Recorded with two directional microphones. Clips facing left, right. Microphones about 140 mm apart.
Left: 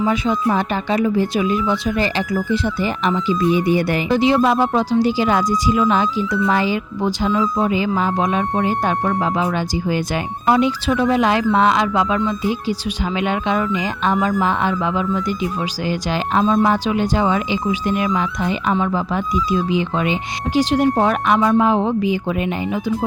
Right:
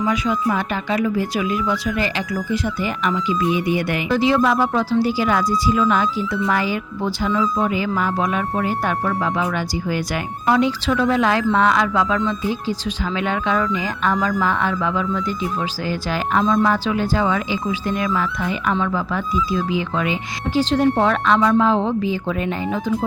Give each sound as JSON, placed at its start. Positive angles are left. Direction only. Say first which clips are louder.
{"t": 0.0, "sound": "speech", "louder": "left 2 dB", "side_deg": 30}
{"t": 4.1, "sound": "speech", "louder": "left 1 dB", "side_deg": 20}